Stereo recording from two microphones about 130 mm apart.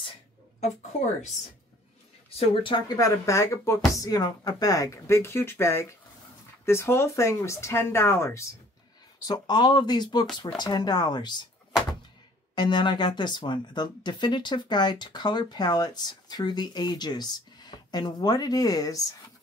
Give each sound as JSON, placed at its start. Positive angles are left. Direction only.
{"t": 2.3, "sound": "speech", "side_deg": 40}
{"t": 3.0, "sound": "speech", "side_deg": 25}
{"t": 9.3, "sound": "speech", "side_deg": 35}
{"t": 12.5, "sound": "speech", "side_deg": 35}